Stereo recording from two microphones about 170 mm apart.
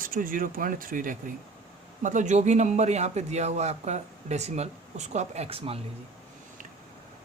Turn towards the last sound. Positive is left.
turn(degrees=-35)  # may be behind; listen again after turning